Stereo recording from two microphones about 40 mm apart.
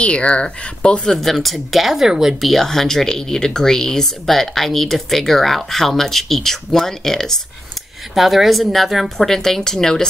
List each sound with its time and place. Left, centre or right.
0.0 s speech: left
1.2 s a woman's voice: centre
2.4 s speech: centre
8.1 s a woman's voice: centre